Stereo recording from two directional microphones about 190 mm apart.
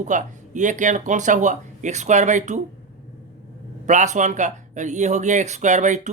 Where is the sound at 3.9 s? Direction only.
40° right (ahead or behind).